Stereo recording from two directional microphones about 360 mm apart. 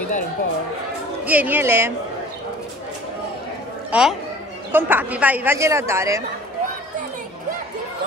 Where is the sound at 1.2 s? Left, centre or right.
Centre.